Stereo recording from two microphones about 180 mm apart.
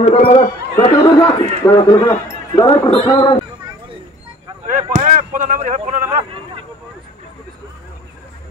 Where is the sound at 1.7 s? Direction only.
25° left (ahead or behind).